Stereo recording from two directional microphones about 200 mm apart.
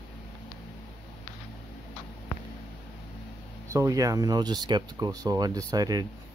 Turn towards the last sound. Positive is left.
turn(degrees=-20)  # may be behind; listen again after turning